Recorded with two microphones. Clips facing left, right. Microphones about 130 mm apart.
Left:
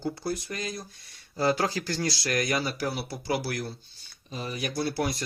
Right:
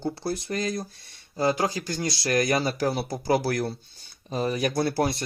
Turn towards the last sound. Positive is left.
turn(degrees=-35)  # may be behind; listen again after turning